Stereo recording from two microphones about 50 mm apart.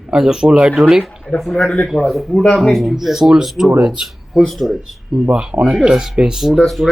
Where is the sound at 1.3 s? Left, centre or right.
Left.